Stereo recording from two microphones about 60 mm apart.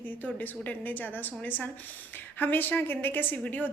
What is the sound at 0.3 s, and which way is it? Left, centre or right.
A woman's voice, left.